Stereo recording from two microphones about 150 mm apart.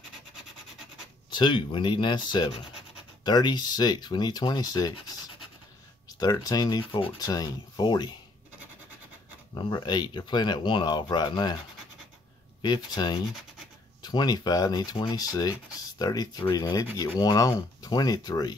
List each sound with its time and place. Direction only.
1.3 s speech: 30° left (ahead or behind)
9.5 s speech: 30° left (ahead or behind)
12.6 s speech: 30° left (ahead or behind)